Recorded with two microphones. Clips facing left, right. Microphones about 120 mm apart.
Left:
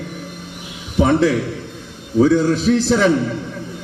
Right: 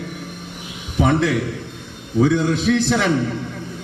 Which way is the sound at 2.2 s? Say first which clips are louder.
Left 2 dB; 40° left (ahead or behind).